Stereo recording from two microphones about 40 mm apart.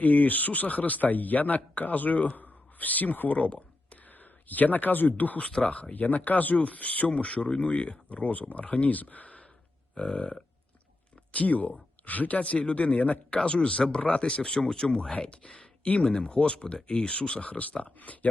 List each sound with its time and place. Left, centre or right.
0.0 s speech: left
5.5 s speech: left
5.9 s speech: left
7.1 s speech: left
9.9 s burping: left
11.3 s speech: left